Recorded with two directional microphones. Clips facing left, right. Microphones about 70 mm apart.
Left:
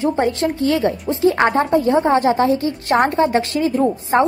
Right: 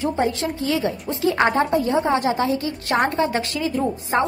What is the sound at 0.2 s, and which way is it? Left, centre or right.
Speech, left.